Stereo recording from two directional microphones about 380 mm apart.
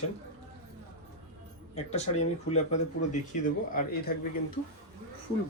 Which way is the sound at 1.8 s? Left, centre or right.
Centre.